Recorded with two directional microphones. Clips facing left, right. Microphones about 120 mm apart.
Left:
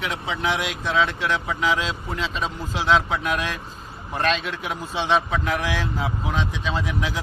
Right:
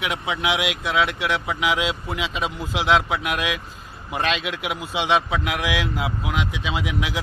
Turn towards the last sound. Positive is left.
turn(degrees=-10)  # may be behind; listen again after turning